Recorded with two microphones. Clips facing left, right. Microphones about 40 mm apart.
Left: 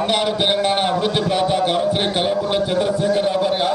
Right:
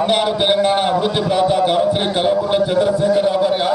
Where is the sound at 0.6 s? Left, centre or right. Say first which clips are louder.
Right 3 dB; centre.